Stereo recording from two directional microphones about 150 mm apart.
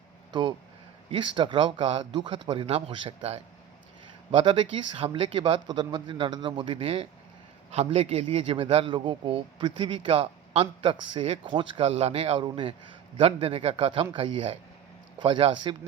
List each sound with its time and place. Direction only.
1.1 s a man's voice: 30° right (ahead or behind)